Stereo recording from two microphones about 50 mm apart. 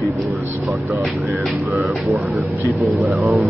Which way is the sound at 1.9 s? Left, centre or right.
Centre.